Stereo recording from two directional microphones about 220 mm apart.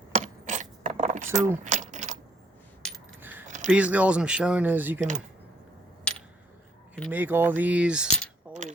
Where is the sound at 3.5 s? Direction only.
35° right (ahead or behind).